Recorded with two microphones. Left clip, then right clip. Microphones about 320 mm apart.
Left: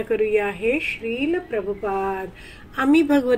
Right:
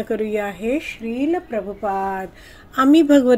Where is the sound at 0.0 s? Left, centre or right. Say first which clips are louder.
Left 2 dB; right.